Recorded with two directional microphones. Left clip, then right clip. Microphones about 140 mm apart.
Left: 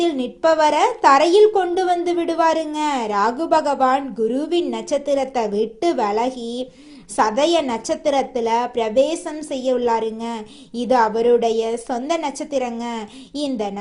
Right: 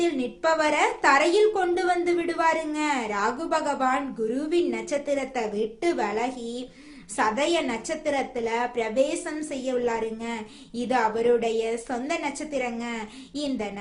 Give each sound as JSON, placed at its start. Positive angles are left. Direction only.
{"t": 0.0, "sound": "a woman's voice", "side_deg": 35}